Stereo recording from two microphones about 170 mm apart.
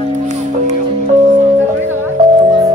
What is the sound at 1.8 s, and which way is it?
Music, 15° right (ahead or behind).